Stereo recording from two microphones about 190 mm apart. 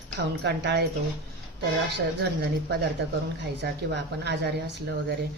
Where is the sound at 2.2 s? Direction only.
60° right (ahead or behind).